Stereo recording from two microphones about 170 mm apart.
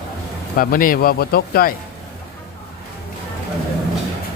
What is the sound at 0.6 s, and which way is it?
Speech, 55° left (ahead or behind).